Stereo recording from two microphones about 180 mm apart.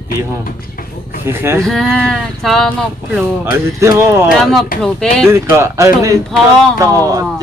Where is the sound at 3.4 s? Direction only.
15° right (ahead or behind).